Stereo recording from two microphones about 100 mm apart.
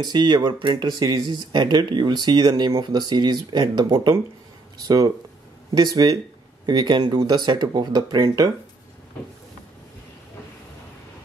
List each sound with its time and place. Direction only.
0.0 s speech: 45° right (ahead or behind)
0.8 s speech: 40° right (ahead or behind)
3.9 s speech: 30° right (ahead or behind)